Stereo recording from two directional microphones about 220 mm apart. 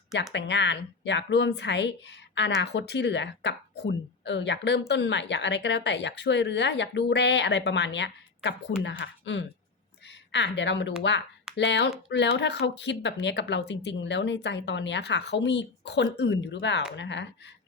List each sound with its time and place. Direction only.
0.3 s speech: 50° left (ahead or behind)